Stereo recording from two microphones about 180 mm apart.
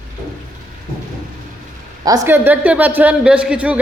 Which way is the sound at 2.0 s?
15° right (ahead or behind).